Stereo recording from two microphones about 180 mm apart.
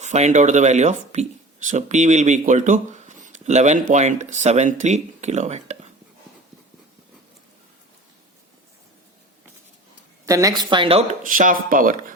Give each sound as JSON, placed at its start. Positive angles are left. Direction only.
{"t": 0.0, "sound": "speech", "side_deg": -40}
{"t": 10.2, "sound": "speech", "side_deg": -20}
{"t": 11.2, "sound": "speech", "side_deg": -50}